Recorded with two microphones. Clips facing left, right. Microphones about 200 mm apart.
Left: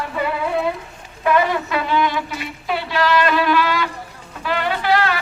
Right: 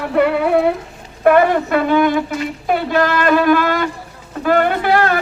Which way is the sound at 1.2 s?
55° right (ahead or behind).